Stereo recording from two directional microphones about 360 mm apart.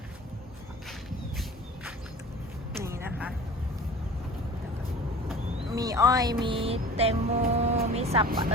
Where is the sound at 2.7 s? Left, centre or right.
Centre.